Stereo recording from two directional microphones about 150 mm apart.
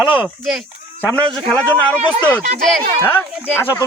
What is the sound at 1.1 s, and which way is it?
Speech, 10° left (ahead or behind).